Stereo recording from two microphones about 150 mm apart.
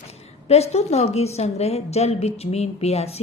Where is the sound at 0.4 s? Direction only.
45° left (ahead or behind).